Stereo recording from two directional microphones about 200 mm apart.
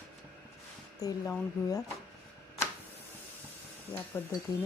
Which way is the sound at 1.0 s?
15° left (ahead or behind).